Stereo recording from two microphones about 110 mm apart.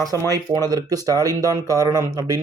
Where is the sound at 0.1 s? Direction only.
35° right (ahead or behind).